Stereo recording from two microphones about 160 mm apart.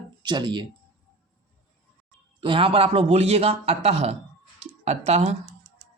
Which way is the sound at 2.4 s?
35° right (ahead or behind).